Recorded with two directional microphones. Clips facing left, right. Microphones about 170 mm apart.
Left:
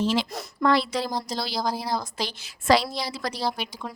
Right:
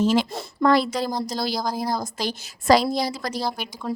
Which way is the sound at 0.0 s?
45° right (ahead or behind).